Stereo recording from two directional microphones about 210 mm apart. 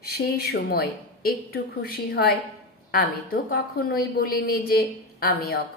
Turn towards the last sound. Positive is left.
turn(degrees=45)  # may be behind; listen again after turning